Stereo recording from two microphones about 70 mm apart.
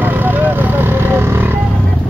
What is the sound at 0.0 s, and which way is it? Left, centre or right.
Vehicle, right.